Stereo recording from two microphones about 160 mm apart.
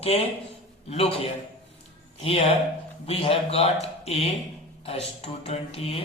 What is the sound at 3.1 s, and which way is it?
Speech, 40° left (ahead or behind).